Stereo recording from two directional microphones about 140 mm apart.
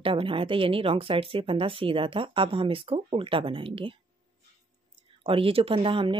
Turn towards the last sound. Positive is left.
turn(degrees=-40)  # may be behind; listen again after turning